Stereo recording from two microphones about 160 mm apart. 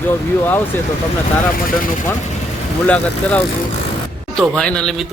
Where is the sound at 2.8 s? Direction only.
10° left (ahead or behind).